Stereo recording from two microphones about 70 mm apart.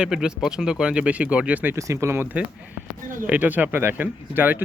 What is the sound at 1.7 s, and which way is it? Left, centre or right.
Speech, right.